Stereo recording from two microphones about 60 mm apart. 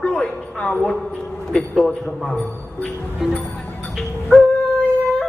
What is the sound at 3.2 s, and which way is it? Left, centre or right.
Speech, centre.